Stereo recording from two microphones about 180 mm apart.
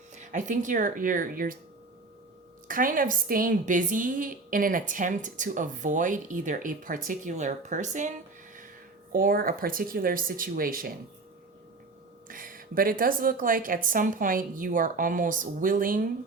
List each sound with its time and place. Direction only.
0.2 s a woman's voice: 45° right (ahead or behind)
2.6 s a woman's voice: 50° right (ahead or behind)
9.1 s a woman's voice: 50° right (ahead or behind)
12.3 s a woman's voice: 50° right (ahead or behind)